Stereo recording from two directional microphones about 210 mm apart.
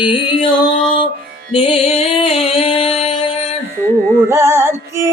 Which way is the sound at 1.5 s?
25° left (ahead or behind).